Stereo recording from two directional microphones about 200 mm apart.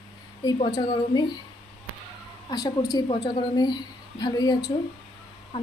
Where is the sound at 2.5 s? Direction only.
20° left (ahead or behind).